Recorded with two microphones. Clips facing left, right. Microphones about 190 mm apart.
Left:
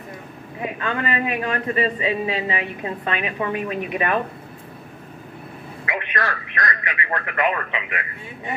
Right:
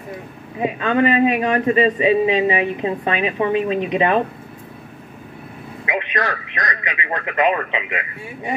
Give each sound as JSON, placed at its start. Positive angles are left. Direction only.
{"t": 0.6, "sound": "a man's voice", "side_deg": -20}
{"t": 5.9, "sound": "a man's voice", "side_deg": -20}